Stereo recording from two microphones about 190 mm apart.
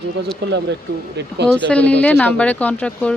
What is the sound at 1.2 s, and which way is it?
Speech, 65° right (ahead or behind).